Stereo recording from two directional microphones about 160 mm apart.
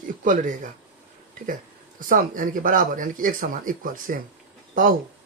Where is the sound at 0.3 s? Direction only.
55° right (ahead or behind).